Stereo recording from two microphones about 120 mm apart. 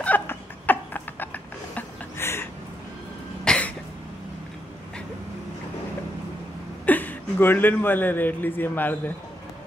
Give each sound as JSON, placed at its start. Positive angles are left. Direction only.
{"t": 0.0, "sound": "a sound", "side_deg": 15}
{"t": 3.4, "sound": "cough", "side_deg": 10}
{"t": 6.9, "sound": "a man's voice", "side_deg": 15}